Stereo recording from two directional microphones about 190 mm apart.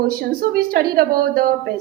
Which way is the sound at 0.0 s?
50° right (ahead or behind).